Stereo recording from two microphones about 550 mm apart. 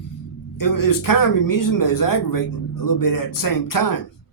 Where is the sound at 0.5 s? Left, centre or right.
Left.